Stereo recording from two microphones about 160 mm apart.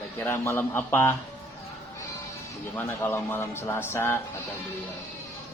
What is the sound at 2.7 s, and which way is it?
Speech, 15° left (ahead or behind).